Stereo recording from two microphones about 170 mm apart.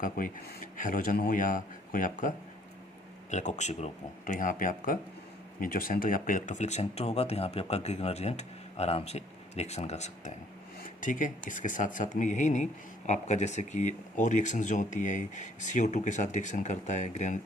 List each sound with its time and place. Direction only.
0.0 s speech: 50° left (ahead or behind)